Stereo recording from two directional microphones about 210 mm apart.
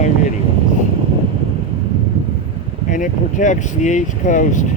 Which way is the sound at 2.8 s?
35° left (ahead or behind).